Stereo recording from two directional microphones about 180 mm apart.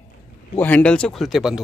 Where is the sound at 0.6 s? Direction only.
10° left (ahead or behind).